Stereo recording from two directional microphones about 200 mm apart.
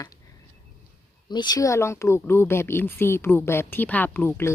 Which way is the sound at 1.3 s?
20° left (ahead or behind).